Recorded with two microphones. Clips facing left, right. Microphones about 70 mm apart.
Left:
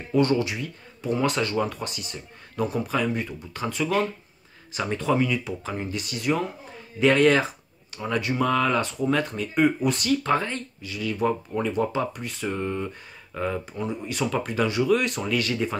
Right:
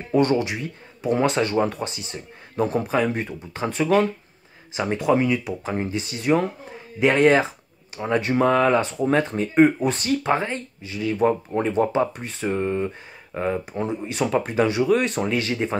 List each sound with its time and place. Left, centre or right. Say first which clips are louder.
0.1 s speech: right 2 dB; right
4.7 s speech: right 3 dB; right